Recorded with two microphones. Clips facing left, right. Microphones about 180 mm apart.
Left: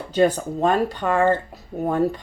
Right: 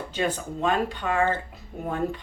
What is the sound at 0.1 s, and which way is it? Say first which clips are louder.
Speech: left 10 dB; 40° left (ahead or behind).